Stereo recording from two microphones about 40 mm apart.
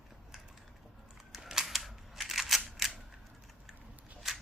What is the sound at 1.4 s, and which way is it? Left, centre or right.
Camera, centre.